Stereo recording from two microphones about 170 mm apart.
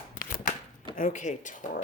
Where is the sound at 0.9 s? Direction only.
45° left (ahead or behind).